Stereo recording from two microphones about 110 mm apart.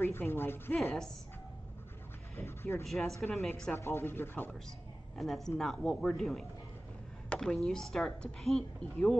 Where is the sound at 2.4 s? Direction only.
25° left (ahead or behind).